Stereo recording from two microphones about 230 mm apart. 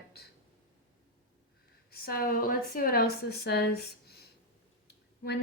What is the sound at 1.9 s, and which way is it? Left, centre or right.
A woman's voice, left.